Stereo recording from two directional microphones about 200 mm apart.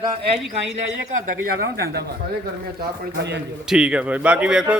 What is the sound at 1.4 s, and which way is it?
Speech, 50° right (ahead or behind).